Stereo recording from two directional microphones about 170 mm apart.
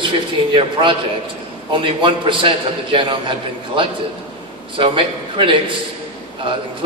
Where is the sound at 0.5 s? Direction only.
30° right (ahead or behind).